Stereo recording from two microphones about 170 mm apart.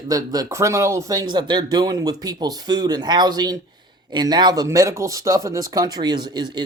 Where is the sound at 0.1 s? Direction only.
20° right (ahead or behind).